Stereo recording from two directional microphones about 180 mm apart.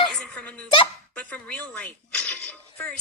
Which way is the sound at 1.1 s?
5° left (ahead or behind).